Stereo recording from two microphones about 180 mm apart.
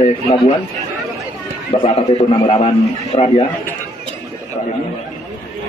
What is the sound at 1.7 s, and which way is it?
A man's voice, 30° left (ahead or behind).